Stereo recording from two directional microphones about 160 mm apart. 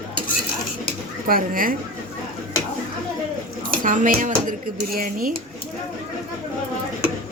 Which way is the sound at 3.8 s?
55° right (ahead or behind).